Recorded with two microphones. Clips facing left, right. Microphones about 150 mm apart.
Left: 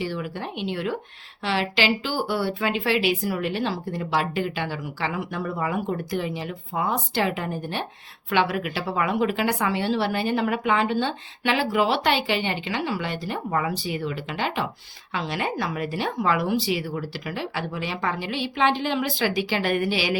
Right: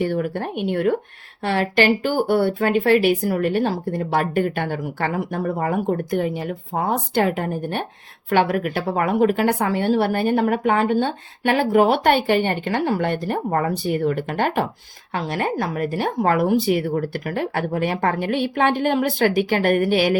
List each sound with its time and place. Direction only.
0.0 s a woman's voice: 55° right (ahead or behind)